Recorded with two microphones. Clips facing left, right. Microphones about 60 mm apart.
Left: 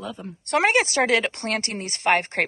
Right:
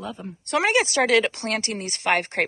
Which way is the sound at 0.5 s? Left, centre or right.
Left.